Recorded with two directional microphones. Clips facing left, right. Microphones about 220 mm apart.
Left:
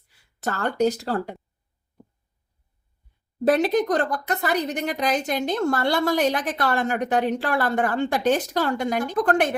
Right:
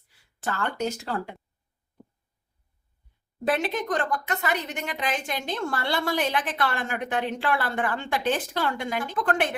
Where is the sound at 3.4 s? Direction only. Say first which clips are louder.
Left 7 dB; 40° left (ahead or behind).